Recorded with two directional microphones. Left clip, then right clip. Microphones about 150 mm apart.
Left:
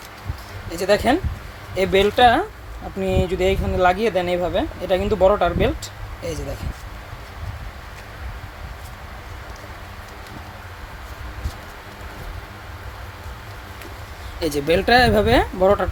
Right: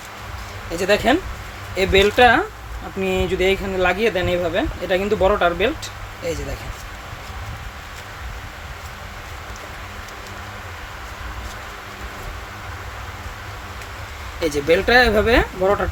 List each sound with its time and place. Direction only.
0.7 s speech: 25° left (ahead or behind)
14.3 s speech: 35° left (ahead or behind)